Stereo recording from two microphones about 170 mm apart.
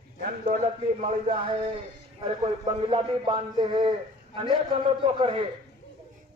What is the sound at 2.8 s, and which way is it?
A man's voice, 35° right (ahead or behind).